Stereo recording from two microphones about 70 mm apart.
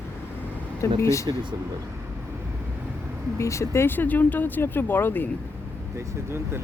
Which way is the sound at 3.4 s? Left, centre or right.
Left.